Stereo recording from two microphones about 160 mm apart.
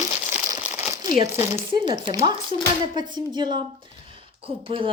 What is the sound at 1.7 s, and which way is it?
Speech, 30° right (ahead or behind).